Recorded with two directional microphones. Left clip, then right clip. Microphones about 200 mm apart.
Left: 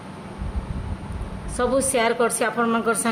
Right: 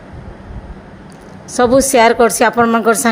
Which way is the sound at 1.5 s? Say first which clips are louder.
Right 11 dB; 40° right (ahead or behind).